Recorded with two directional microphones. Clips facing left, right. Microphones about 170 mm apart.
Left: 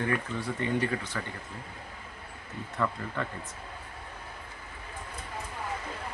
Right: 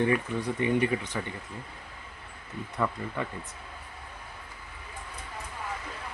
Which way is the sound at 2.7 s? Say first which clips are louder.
Right 1 dB; 10° right (ahead or behind).